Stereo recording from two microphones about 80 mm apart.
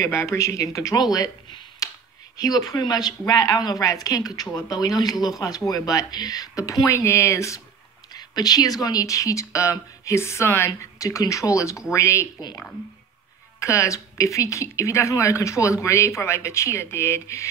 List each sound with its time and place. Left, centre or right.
0.0 s speech: left
1.8 s a sound: left
2.3 s speech: left
6.9 s speech: left
8.1 s speech: left
10.8 s speech: left
13.6 s speech: left